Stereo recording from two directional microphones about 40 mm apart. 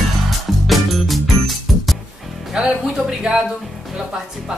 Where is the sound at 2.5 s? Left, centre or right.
Right.